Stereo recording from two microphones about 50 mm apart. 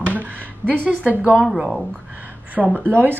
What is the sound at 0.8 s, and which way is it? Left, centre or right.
Speech, right.